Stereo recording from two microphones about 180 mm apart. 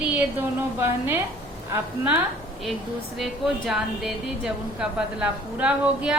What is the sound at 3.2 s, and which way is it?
Speech, centre (ahead or behind).